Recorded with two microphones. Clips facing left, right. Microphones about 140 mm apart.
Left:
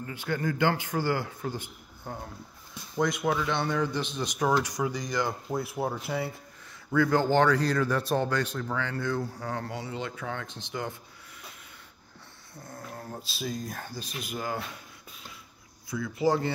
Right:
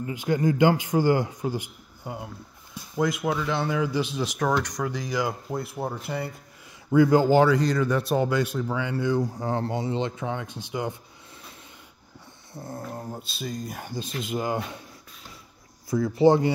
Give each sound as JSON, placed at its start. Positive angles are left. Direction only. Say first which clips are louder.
{"t": 0.0, "sound": "speech", "louder": "right 7 dB", "side_deg": -15}
{"t": 6.9, "sound": "speech", "louder": "right 6 dB", "side_deg": -15}
{"t": 12.5, "sound": "speech", "louder": "right 7 dB", "side_deg": -25}
{"t": 13.2, "sound": "speech", "louder": "right 1 dB", "side_deg": 0}
{"t": 13.7, "sound": "speech", "louder": "right 5 dB", "side_deg": -20}
{"t": 16.2, "sound": "speech", "louder": "right 7 dB", "side_deg": -25}